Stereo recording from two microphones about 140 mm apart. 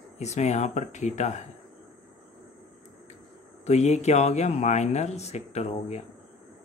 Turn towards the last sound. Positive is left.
turn(degrees=50)  # may be behind; listen again after turning